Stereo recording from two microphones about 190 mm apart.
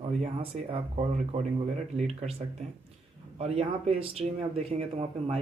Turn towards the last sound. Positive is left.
turn(degrees=-30)  # may be behind; listen again after turning